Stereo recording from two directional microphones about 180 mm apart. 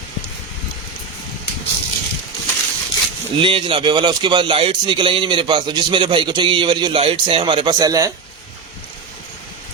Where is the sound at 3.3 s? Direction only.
30° right (ahead or behind).